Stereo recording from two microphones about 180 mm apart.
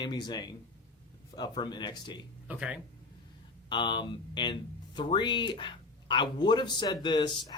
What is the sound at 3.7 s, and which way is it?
Speech, 25° left (ahead or behind).